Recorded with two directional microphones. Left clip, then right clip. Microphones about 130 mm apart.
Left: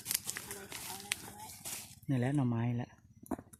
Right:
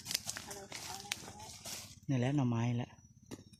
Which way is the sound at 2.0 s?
20° left (ahead or behind).